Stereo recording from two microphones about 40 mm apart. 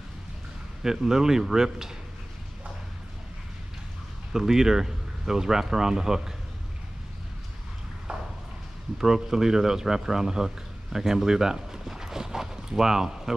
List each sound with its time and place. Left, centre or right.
0.8 s speech: centre
4.3 s speech: centre
8.1 s a sound: right
8.9 s speech: centre